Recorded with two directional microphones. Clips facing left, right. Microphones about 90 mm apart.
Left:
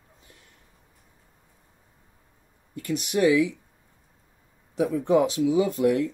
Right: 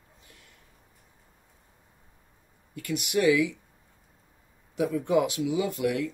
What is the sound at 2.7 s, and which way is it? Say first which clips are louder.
Speech: left 1 dB; 35° left (ahead or behind).